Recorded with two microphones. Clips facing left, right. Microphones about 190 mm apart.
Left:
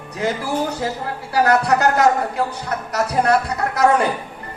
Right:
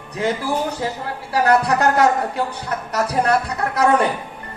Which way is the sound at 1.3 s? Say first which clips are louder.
Even; 30° right (ahead or behind).